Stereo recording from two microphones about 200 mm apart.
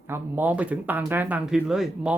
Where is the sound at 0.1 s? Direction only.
10° right (ahead or behind).